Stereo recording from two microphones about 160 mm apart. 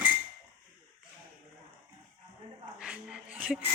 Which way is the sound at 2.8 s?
5° right (ahead or behind).